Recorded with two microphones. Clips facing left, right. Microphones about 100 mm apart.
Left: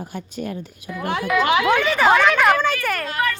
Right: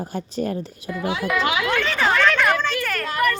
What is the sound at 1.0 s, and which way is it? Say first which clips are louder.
Speech: left 1 dB; 55° left (ahead or behind).